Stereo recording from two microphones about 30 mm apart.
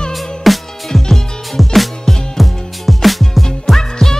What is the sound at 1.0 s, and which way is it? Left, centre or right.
Music, centre.